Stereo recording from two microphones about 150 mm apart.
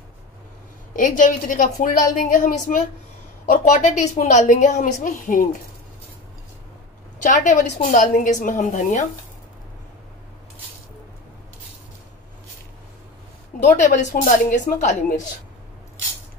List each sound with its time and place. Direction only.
0.9 s a woman's voice: 60° left (ahead or behind)
7.2 s a woman's voice: 55° left (ahead or behind)
13.7 s a woman's voice: 55° left (ahead or behind)